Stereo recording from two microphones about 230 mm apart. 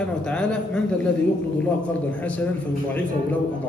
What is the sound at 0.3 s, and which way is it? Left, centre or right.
Speech, centre.